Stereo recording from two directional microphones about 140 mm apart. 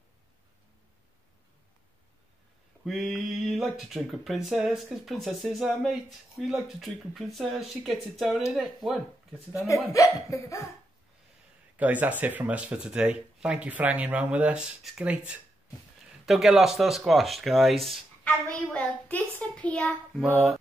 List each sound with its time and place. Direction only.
2.8 s speech: centre (ahead or behind)
9.9 s speech: 20° left (ahead or behind)
11.7 s speech: 10° right (ahead or behind)